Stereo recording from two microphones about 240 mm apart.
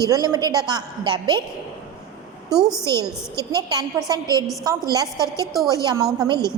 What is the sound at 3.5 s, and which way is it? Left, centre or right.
A woman's voice, centre.